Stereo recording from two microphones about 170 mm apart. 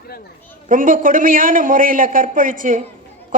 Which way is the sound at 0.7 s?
55° right (ahead or behind).